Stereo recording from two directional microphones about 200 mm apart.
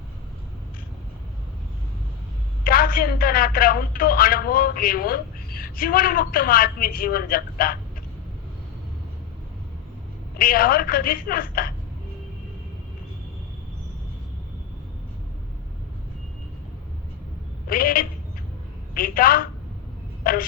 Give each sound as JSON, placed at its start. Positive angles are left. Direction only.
{"t": 2.6, "sound": "speech", "side_deg": 45}
{"t": 10.3, "sound": "speech", "side_deg": 45}
{"t": 17.7, "sound": "a woman's voice", "side_deg": 45}